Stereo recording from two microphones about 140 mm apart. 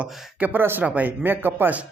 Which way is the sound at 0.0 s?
5° right (ahead or behind).